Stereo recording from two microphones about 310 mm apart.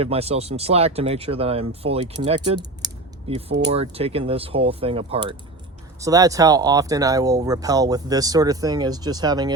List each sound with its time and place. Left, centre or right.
0.0 s speech: centre